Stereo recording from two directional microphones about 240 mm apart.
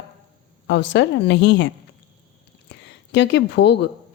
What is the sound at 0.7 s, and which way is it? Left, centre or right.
A woman's voice, left.